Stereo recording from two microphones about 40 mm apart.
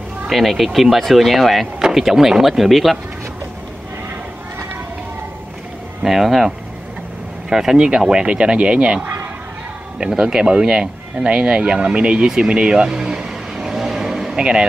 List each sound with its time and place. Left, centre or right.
0.3 s speech: centre
1.8 s speech: centre
6.0 s speech: centre; by 9.0 s right
9.0 s fowl: right
9.9 s speech: right
12.4 s vehicle: right